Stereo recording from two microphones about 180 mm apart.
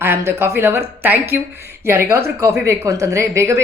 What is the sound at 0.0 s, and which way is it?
A woman's voice, 15° right (ahead or behind).